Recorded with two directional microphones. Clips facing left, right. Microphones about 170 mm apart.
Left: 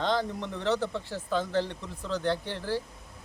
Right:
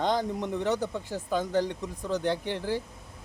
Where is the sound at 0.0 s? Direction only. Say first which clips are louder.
Right 1 dB; 15° right (ahead or behind).